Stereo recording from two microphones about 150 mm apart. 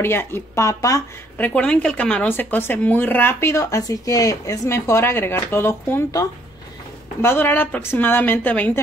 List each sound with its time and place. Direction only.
0.0 s speech: 15° left (ahead or behind)
1.4 s a woman's voice: 10° left (ahead or behind)